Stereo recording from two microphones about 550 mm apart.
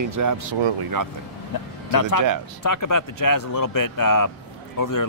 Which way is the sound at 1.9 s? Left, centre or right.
Left.